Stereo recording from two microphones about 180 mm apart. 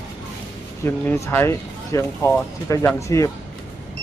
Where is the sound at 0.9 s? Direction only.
15° left (ahead or behind).